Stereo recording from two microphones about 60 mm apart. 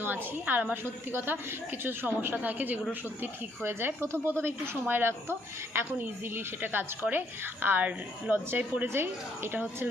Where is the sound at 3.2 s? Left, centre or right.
Right.